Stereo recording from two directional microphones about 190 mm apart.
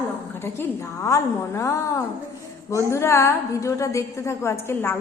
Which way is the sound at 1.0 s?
15° left (ahead or behind).